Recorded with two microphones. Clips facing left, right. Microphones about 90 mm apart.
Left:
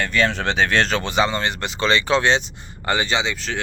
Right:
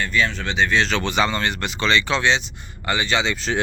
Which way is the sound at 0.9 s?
35° left (ahead or behind).